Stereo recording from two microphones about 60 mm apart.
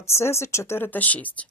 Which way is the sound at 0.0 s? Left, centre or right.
Left.